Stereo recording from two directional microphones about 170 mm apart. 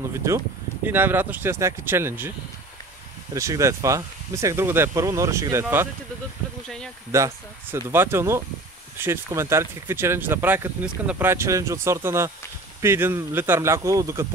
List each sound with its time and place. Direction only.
0.8 s speech: 10° right (ahead or behind)
3.3 s speech: 20° right (ahead or behind)
7.1 s speech: 15° right (ahead or behind)